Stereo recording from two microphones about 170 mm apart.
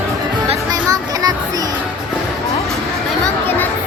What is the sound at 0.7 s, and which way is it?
Music, 20° right (ahead or behind).